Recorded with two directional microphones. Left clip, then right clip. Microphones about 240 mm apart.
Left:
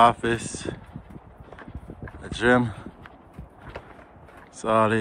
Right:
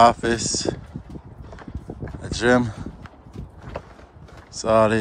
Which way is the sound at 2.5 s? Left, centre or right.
Right.